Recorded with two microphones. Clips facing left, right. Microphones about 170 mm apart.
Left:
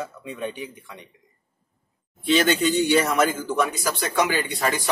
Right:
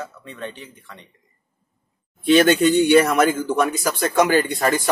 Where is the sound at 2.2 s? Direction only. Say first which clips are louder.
Right 6 dB; 55° right (ahead or behind).